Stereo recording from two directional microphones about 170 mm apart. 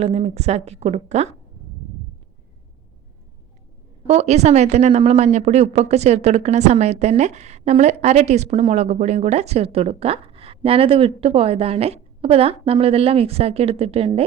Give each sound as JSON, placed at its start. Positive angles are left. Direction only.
{"t": 0.0, "sound": "speech", "side_deg": -35}
{"t": 4.0, "sound": "speech", "side_deg": -40}